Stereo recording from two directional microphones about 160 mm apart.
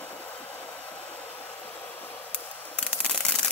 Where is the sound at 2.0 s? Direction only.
10° left (ahead or behind).